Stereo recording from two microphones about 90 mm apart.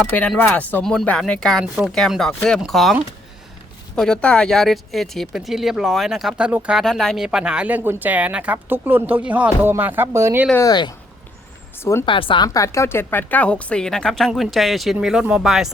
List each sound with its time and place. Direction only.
0.0 s speech: 20° left (ahead or behind); by 2.9 s centre (ahead or behind)
3.9 s speech: 10° left (ahead or behind)
6.3 s speech: 15° right (ahead or behind)
6.7 s speech: centre (ahead or behind)
7.8 s speech: 20° right (ahead or behind)
10.6 s speech: 50° left (ahead or behind)
11.8 s speech: 25° left (ahead or behind)
12.0 s speech: 70° left (ahead or behind)
12.5 s speech: 35° left (ahead or behind); by 15.7 s 5° right (ahead or behind)